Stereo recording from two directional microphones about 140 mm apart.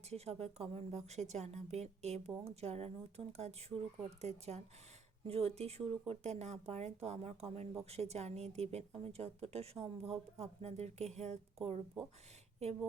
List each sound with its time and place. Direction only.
0.1 s a woman's voice: 50° right (ahead or behind)